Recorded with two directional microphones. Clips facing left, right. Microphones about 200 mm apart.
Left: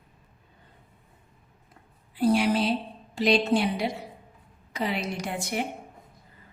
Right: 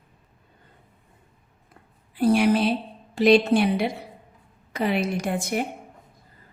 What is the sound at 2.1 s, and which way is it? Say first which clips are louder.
A woman's voice: right 3 dB; 55° right (ahead or behind).